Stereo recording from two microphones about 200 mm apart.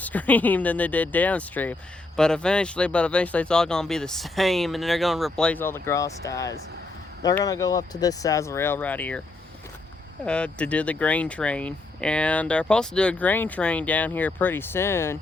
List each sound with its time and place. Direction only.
0.0 s speech: 10° left (ahead or behind)
10.2 s speech: 5° left (ahead or behind)